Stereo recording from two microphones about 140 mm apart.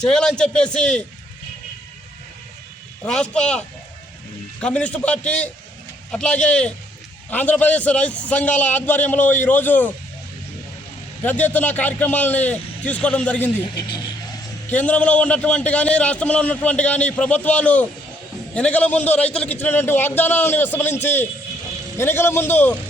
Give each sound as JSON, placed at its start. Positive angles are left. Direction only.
{"t": 0.0, "sound": "a man's voice", "side_deg": 5}
{"t": 3.0, "sound": "a man's voice", "side_deg": 5}
{"t": 4.6, "sound": "a man's voice", "side_deg": 10}
{"t": 11.2, "sound": "a man's voice", "side_deg": 10}
{"t": 13.7, "sound": "speech", "side_deg": 30}
{"t": 14.7, "sound": "a man's voice", "side_deg": 10}